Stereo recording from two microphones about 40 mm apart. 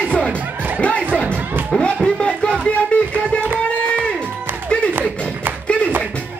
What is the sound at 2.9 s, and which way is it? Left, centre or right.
Music, left.